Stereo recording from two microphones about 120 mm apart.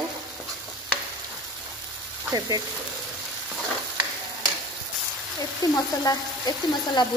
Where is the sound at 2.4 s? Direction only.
30° right (ahead or behind).